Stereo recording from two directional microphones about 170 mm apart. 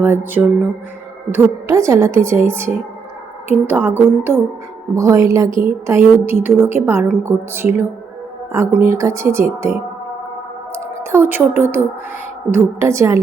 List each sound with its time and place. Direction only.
0.0 s a woman's voice: 10° right (ahead or behind)
11.1 s a woman's voice: 10° right (ahead or behind)